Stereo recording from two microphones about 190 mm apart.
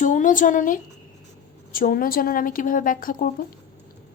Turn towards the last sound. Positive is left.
turn(degrees=45)  # may be behind; listen again after turning